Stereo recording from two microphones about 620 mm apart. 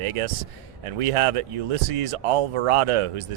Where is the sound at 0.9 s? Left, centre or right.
Right.